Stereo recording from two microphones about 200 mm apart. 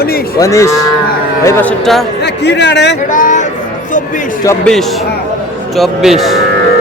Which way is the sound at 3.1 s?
40° left (ahead or behind).